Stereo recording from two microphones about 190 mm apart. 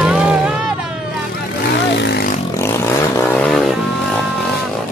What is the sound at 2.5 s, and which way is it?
Vehicle, 15° left (ahead or behind).